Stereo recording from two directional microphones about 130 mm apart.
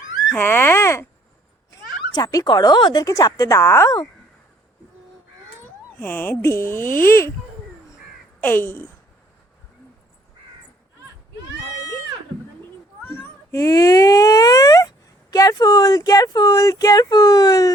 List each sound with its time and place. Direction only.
0.3 s speech: 15° left (ahead or behind)
2.1 s speech: 30° left (ahead or behind)
6.0 s speech: 15° left (ahead or behind)
8.4 s speech: 15° left (ahead or behind)
13.1 s speech: 20° left (ahead or behind)